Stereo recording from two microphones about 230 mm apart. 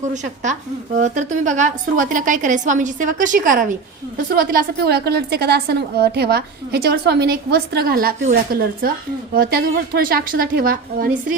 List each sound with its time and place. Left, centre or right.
0.0 s a woman's voice: right